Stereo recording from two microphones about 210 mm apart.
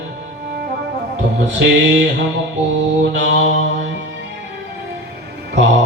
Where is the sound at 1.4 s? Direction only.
60° right (ahead or behind).